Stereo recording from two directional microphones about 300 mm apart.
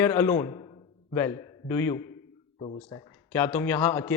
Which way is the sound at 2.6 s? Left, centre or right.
Centre.